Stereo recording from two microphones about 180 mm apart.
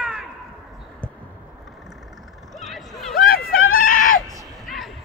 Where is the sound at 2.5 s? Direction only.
Centre (ahead or behind).